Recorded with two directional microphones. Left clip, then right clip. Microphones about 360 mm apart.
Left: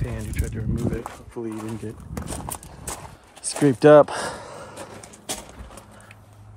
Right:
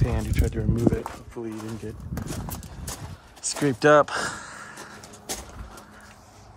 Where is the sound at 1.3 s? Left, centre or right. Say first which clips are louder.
Left 5 dB; centre.